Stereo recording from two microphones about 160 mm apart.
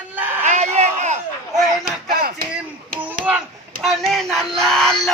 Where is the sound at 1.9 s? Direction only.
65° right (ahead or behind).